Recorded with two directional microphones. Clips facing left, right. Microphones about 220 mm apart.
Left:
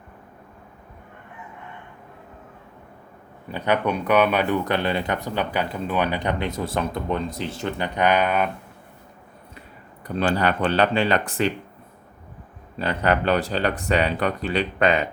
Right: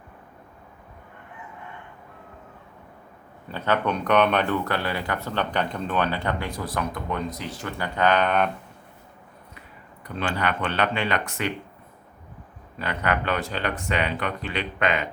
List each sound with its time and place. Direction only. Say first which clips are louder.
3.5 s speech: left 2 dB; 10° left (ahead or behind)
10.2 s speech: left 5 dB; 35° left (ahead or behind)
12.8 s speech: left 5 dB; 30° left (ahead or behind)